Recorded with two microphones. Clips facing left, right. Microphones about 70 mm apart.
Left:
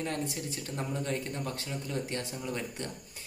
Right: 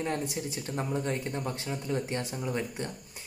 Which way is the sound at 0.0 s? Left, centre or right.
Right.